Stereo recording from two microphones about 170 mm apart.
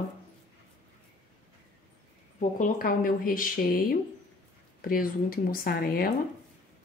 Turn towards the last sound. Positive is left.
turn(degrees=60)  # may be behind; listen again after turning